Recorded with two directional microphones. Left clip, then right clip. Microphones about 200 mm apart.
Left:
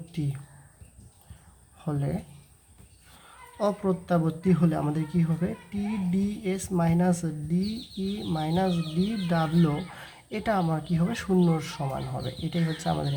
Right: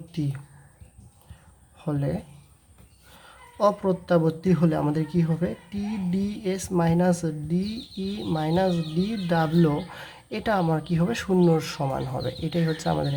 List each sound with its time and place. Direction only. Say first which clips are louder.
0.1 s speech: right 4 dB; 15° right (ahead or behind)
1.8 s speech: right 4 dB; 15° right (ahead or behind)
3.2 s a woman's voice: right 6 dB; 15° right (ahead or behind)